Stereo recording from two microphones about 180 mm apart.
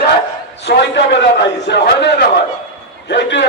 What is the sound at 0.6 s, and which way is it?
A man's voice, 70° left (ahead or behind).